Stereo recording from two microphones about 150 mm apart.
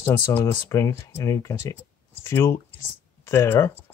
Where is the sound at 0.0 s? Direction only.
20° left (ahead or behind).